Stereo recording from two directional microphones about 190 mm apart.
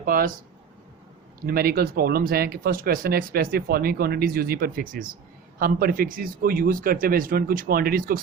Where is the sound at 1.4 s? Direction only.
50° right (ahead or behind).